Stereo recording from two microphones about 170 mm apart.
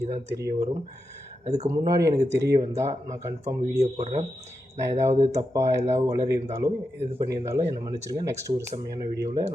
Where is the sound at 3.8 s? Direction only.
40° right (ahead or behind).